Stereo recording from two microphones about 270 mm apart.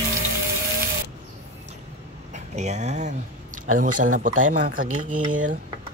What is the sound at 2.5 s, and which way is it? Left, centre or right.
Speech, right.